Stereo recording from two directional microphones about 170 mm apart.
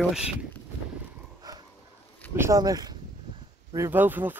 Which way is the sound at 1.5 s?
20° right (ahead or behind).